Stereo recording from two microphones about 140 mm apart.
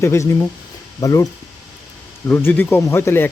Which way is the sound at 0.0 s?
20° left (ahead or behind).